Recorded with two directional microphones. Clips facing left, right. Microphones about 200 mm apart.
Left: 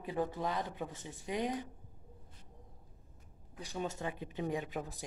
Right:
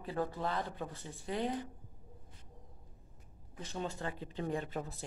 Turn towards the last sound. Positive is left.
turn(degrees=15)  # may be behind; listen again after turning